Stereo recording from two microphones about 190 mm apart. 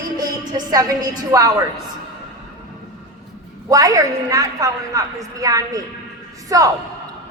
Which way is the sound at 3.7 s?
20° right (ahead or behind).